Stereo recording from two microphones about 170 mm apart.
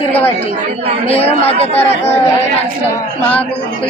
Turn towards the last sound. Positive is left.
turn(degrees=10)  # may be behind; listen again after turning